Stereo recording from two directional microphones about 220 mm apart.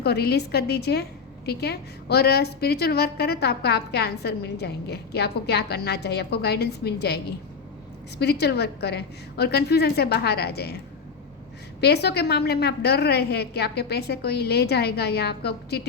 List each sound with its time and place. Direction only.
0.0 s a woman's voice: 45° left (ahead or behind)
11.8 s a woman's voice: 50° left (ahead or behind)